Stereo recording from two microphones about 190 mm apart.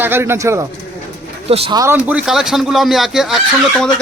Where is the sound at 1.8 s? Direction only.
10° right (ahead or behind).